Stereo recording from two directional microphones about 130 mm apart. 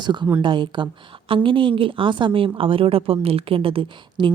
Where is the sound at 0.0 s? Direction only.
35° right (ahead or behind).